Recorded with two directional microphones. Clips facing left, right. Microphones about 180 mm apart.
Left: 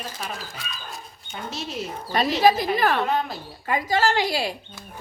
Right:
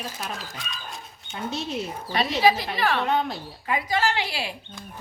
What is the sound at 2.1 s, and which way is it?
Speech, 45° left (ahead or behind).